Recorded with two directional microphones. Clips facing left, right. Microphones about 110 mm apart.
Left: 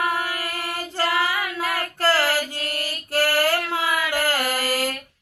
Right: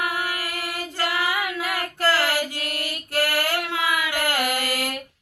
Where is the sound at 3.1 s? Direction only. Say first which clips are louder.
Left 3 dB; 30° left (ahead or behind).